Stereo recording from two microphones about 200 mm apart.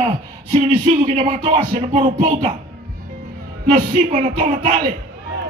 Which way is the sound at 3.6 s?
35° right (ahead or behind).